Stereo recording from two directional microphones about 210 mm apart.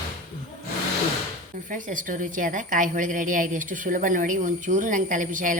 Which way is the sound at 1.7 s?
40° right (ahead or behind).